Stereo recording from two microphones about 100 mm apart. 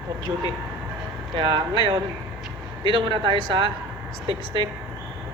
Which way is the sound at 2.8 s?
50° right (ahead or behind).